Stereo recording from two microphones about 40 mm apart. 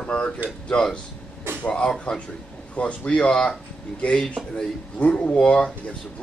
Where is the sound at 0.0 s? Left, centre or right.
Left.